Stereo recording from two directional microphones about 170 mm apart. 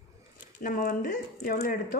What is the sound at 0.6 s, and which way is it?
Speech, 55° left (ahead or behind).